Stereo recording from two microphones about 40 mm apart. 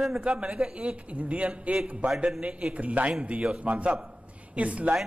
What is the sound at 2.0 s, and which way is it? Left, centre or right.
Speech, centre.